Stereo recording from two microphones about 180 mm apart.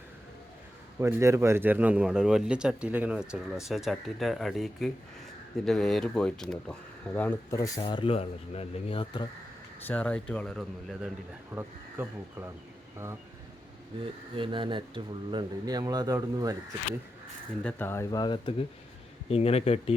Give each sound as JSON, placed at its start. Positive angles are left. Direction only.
{"t": 0.9, "sound": "a man's voice", "side_deg": -15}
{"t": 9.8, "sound": "a man's voice", "side_deg": 10}
{"t": 11.5, "sound": "speech", "side_deg": -10}
{"t": 14.0, "sound": "speech", "side_deg": -30}
{"t": 17.6, "sound": "speech", "side_deg": 10}